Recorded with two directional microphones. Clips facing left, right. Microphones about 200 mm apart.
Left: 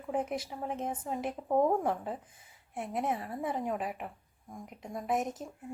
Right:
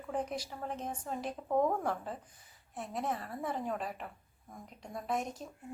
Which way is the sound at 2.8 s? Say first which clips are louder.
Left 4 dB; 20° left (ahead or behind).